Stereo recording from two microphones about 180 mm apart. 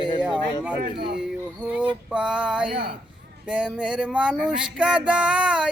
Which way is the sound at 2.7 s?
30° right (ahead or behind).